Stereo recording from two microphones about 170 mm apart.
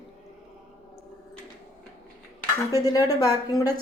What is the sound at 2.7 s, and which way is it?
Speech, 20° left (ahead or behind).